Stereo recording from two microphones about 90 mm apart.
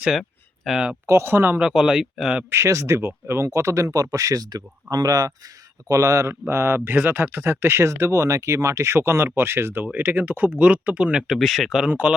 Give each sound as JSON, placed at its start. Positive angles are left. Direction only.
{"t": 0.2, "sound": "a sound", "side_deg": 0}
{"t": 1.0, "sound": "speech", "side_deg": -25}
{"t": 1.6, "sound": "speech", "side_deg": -10}
{"t": 2.5, "sound": "speech", "side_deg": -35}
{"t": 11.3, "sound": "speech", "side_deg": 0}
{"t": 11.9, "sound": "speech", "side_deg": -15}